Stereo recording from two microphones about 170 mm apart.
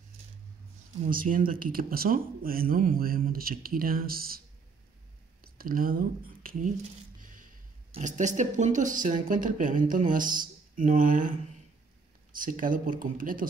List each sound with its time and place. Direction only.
1.0 s speech: 55° right (ahead or behind)
5.4 s speech: 60° right (ahead or behind)
7.2 s squish: 50° right (ahead or behind)
7.9 s speech: 45° right (ahead or behind)
12.4 s speech: 50° right (ahead or behind)